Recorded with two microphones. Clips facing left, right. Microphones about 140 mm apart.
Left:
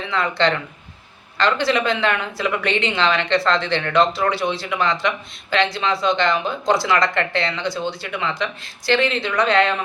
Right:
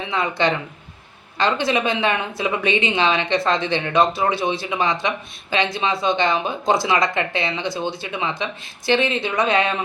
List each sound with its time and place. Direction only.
0.1 s speech: 20° right (ahead or behind)